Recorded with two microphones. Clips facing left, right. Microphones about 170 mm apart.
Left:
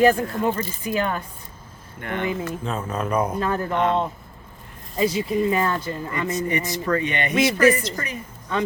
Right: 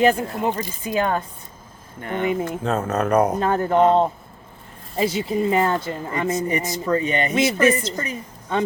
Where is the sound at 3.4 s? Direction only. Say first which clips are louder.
Right 5 dB; 30° right (ahead or behind).